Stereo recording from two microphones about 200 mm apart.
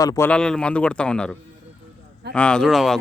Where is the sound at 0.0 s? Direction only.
15° left (ahead or behind).